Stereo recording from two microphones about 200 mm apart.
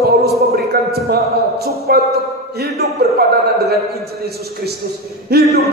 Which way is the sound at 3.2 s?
50° right (ahead or behind).